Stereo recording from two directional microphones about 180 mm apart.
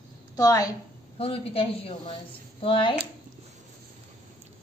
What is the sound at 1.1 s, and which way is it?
A woman's voice, 30° left (ahead or behind).